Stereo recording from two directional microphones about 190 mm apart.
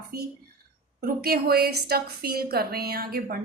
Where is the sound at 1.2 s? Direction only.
55° right (ahead or behind).